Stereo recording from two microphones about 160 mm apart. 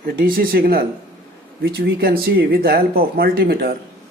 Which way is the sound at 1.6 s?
85° right.